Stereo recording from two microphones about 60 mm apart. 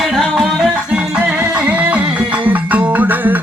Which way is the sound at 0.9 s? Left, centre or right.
Centre.